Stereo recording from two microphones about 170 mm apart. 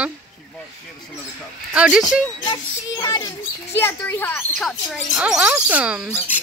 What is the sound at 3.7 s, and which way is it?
Speech, 15° left (ahead or behind).